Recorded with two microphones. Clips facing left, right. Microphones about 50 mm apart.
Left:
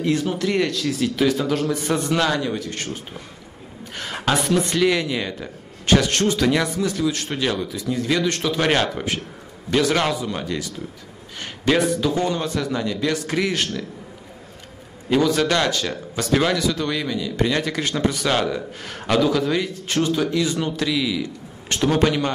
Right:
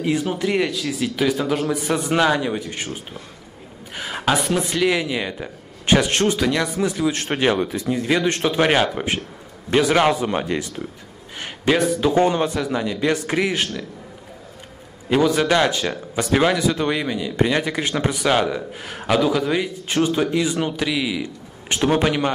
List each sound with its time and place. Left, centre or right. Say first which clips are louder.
0.0 s speech: even; centre
6.4 s speech: left 1 dB; centre
6.8 s speech: right 1 dB; centre
7.1 s speech: right 3 dB; right
7.9 s speech: right 1 dB; right
8.6 s speech: right 2 dB; centre
10.1 s speech: right 4 dB; right
10.4 s speech: right 3 dB; right
11.3 s a sound: even; centre
12.0 s speech: right 4 dB; right
12.4 s speech: right 1 dB; centre
15.0 s speech: right 1 dB; centre